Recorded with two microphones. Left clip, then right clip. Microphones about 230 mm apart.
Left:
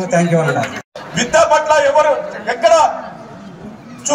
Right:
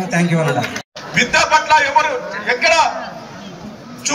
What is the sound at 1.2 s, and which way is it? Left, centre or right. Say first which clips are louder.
Speech: left 2 dB; left.